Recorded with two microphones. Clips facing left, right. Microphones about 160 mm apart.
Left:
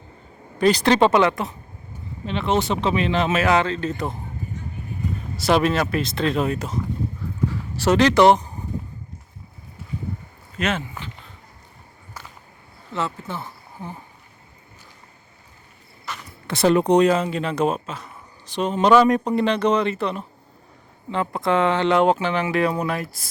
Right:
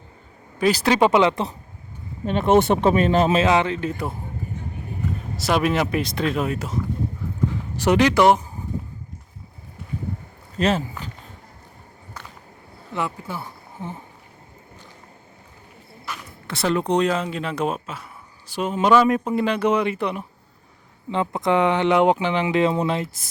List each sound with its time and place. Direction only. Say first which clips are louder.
0.6 s speech: left 1 dB; 5° right (ahead or behind)
2.2 s speech: right 5 dB; 50° right (ahead or behind)
3.3 s speech: right 1 dB; 20° right (ahead or behind)
5.4 s a man's voice: left 2 dB; 5° right (ahead or behind)
5.7 s speech: even; 15° right (ahead or behind)
7.5 s speech: even; 15° right (ahead or behind)
10.6 s speech: right 4 dB; 35° right (ahead or behind)
12.9 s speech: even; 15° right (ahead or behind)
16.5 s speech: left 5 dB; 15° left (ahead or behind)
17.1 s a man's voice: left 3 dB; centre (ahead or behind); by 23.0 s 25° right (ahead or behind)